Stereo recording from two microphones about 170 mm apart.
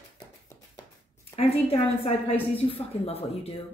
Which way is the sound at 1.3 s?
35° left (ahead or behind).